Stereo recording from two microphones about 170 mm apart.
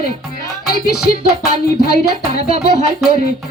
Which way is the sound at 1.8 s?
70° left (ahead or behind).